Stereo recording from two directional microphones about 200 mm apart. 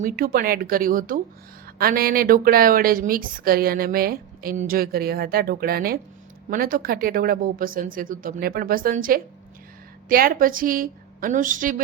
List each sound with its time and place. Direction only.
0.0 s a woman's voice: 45° right (ahead or behind)